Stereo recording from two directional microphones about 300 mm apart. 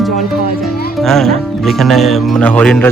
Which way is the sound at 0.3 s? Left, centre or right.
Left.